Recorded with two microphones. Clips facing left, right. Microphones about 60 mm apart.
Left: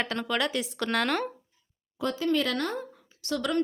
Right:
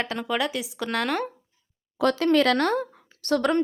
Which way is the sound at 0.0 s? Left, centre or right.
Centre.